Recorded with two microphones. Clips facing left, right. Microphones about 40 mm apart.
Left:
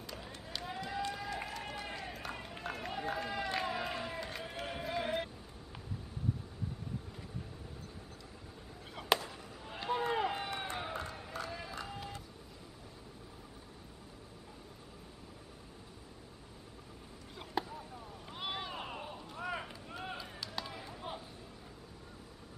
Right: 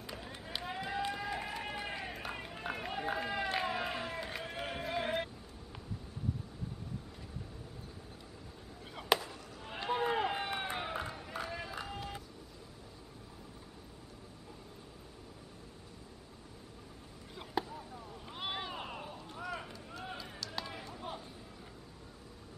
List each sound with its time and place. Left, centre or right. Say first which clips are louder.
0.0 s run: right 1 dB; centre
8.9 s chop: right 1 dB; centre
9.7 s run: right 1 dB; centre
17.4 s a sound: right 1 dB; centre
19.4 s run: left 2 dB; centre
20.5 s chop: right 1 dB; centre
20.8 s a sound: even; centre